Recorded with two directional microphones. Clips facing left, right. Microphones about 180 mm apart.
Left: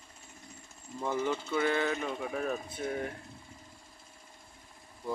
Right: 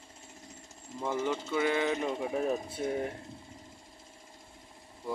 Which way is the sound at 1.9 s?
25° right (ahead or behind).